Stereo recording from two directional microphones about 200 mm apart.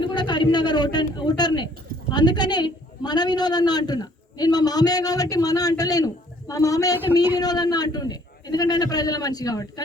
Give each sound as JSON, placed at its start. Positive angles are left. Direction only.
{"t": 0.0, "sound": "a man's voice", "side_deg": 25}